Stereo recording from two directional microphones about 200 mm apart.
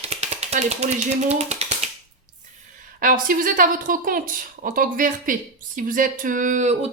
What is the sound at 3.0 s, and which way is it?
A woman's voice, 45° right (ahead or behind).